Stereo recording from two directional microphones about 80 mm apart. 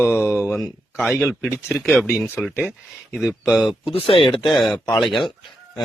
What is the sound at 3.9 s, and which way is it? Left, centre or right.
Speech, left.